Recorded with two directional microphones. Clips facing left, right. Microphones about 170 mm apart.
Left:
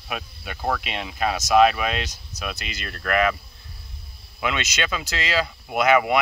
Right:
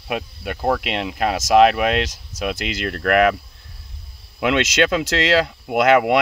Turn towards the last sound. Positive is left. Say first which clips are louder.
# right 4 dB
turn(degrees=-75)  # may be behind; listen again after turning